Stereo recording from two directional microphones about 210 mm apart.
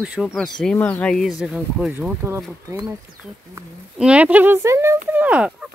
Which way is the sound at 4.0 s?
5° right (ahead or behind).